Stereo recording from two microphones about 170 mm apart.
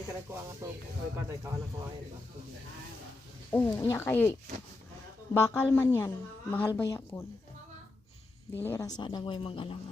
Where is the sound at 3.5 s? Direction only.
20° left (ahead or behind).